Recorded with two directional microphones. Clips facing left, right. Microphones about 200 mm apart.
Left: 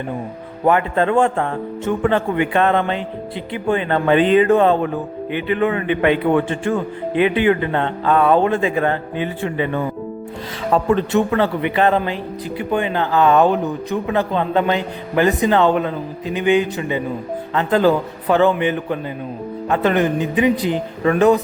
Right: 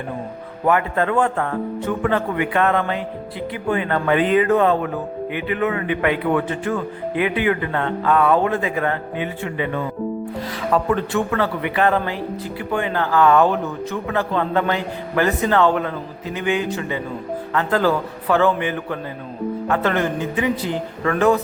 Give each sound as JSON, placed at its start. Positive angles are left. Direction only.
{"t": 0.6, "sound": "a man's voice", "side_deg": 25}
{"t": 10.8, "sound": "a man's voice", "side_deg": 25}